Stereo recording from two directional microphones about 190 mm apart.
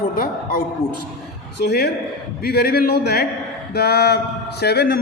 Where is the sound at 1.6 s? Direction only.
55° left (ahead or behind).